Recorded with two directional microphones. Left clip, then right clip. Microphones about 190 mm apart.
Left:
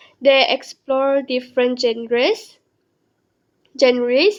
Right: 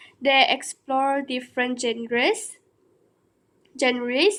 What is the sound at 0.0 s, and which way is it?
Speech, 40° left (ahead or behind).